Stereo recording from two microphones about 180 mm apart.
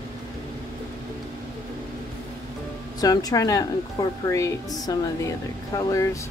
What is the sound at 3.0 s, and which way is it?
Speech, 20° left (ahead or behind).